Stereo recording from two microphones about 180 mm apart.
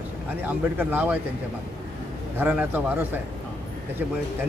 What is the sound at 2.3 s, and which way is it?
Speech, 10° right (ahead or behind).